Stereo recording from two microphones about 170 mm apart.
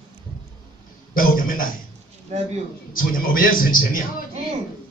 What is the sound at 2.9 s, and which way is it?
A woman's voice, 55° left (ahead or behind).